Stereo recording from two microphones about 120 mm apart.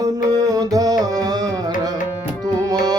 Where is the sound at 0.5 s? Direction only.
30° right (ahead or behind).